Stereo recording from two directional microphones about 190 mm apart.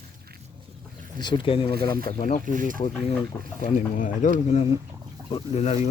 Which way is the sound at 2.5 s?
45° right (ahead or behind).